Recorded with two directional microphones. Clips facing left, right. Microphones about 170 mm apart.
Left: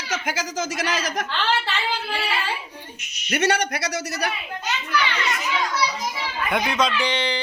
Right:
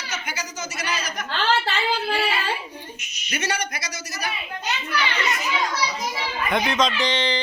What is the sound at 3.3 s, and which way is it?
Speech, 65° left (ahead or behind).